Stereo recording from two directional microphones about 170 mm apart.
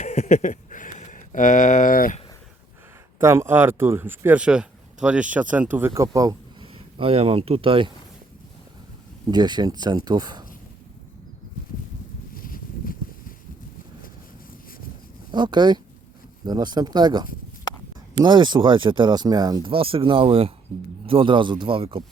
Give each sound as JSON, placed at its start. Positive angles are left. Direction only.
{"t": 0.0, "sound": "a sound", "side_deg": 40}
{"t": 3.2, "sound": "speech", "side_deg": -15}
{"t": 9.3, "sound": "speech", "side_deg": -25}
{"t": 12.3, "sound": "boat", "side_deg": 55}
{"t": 15.3, "sound": "speech", "side_deg": -25}
{"t": 19.7, "sound": "a man's voice", "side_deg": -30}